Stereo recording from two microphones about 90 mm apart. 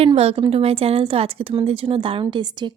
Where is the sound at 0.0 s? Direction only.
90° right.